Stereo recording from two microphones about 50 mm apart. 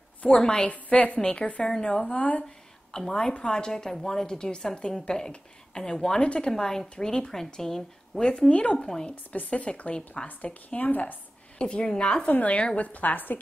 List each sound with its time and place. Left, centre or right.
0.4 s a woman's voice: centre
2.4 s a woman's voice: centre
6.5 s a woman's voice: centre
8.2 s a woman's voice: centre
8.7 s a woman's voice: centre
9.1 s a woman's voice: left
11.5 s a woman's voice: left
12.3 s a woman's voice: left